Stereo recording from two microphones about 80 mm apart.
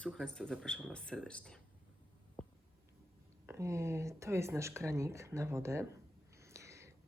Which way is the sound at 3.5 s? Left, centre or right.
Right.